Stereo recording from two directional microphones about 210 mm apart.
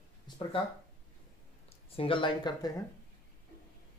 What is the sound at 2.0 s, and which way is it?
Speech, 25° left (ahead or behind).